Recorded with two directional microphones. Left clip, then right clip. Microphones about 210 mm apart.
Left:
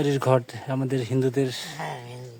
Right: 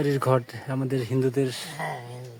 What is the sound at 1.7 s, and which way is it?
Speech, 30° left (ahead or behind).